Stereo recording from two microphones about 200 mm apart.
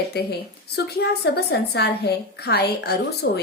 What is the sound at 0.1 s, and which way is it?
A woman's voice, 55° left (ahead or behind).